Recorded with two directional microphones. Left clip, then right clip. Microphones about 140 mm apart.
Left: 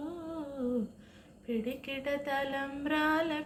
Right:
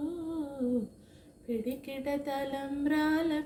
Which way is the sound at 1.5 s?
30° right (ahead or behind).